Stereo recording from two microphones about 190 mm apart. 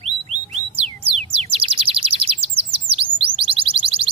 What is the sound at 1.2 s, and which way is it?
Chirp, 30° right (ahead or behind).